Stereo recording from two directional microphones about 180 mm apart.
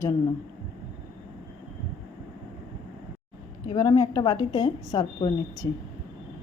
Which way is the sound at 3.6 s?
20° left (ahead or behind).